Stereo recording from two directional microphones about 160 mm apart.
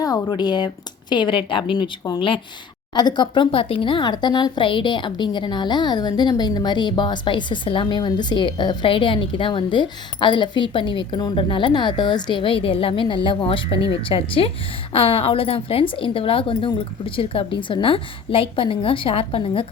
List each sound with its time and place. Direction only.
0.0 s a woman's voice: 25° left (ahead or behind)